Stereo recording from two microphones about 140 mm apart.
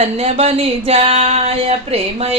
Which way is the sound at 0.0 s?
45° right (ahead or behind).